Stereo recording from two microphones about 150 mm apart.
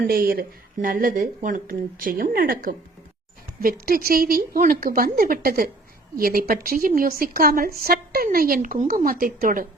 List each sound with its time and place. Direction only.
0.0 s speech: 80° right
7.9 s speech: 85° right